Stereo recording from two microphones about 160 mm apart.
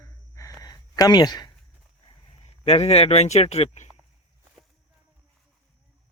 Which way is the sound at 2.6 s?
40° left (ahead or behind).